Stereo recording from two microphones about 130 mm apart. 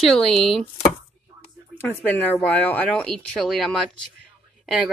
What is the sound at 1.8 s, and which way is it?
Speech, 15° left (ahead or behind).